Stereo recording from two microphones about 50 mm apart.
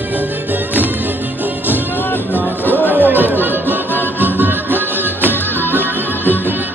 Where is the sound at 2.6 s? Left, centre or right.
Right.